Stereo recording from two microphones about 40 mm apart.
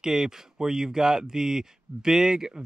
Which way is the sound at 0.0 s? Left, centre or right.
Centre.